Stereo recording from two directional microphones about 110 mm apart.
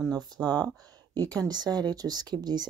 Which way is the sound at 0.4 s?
40° right (ahead or behind).